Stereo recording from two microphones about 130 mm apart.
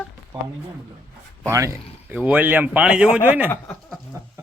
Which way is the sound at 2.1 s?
10° right (ahead or behind).